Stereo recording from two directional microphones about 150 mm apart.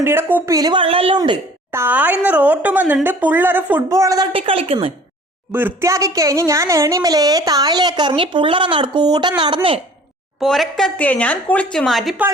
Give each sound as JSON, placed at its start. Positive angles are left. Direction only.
{"t": 0.0, "sound": "speech", "side_deg": -15}
{"t": 1.7, "sound": "speech", "side_deg": -15}
{"t": 4.3, "sound": "a woman's voice", "side_deg": -35}
{"t": 5.5, "sound": "a woman's voice", "side_deg": -15}
{"t": 10.4, "sound": "a woman's voice", "side_deg": 0}